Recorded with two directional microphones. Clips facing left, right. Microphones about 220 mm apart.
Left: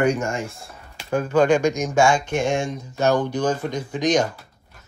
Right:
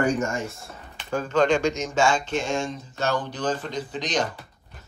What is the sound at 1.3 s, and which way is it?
Speech, 10° left (ahead or behind).